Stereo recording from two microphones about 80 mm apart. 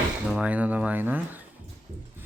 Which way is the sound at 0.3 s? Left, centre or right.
Centre.